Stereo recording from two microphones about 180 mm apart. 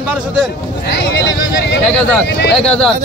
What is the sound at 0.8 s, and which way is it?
Speech, 70° left (ahead or behind).